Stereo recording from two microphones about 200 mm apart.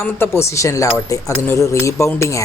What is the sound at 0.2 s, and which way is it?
Speech, 15° left (ahead or behind).